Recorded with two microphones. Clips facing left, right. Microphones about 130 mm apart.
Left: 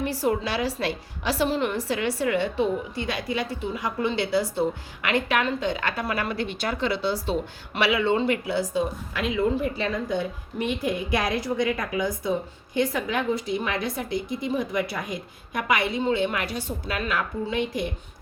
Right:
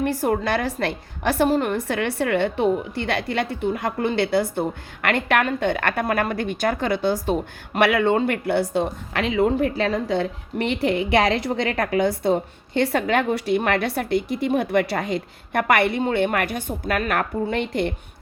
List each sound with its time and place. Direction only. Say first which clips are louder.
0.0 s a woman's voice: right 3 dB; 50° right (ahead or behind)